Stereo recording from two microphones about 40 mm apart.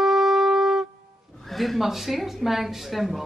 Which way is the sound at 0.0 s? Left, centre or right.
Centre.